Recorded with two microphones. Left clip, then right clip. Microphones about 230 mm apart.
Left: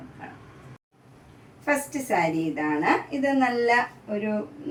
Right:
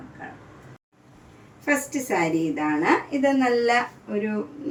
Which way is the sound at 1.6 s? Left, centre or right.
Centre.